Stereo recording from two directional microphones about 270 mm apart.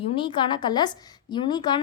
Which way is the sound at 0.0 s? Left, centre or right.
Centre.